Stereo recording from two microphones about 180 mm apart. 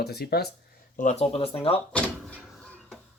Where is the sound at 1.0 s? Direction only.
40° left (ahead or behind).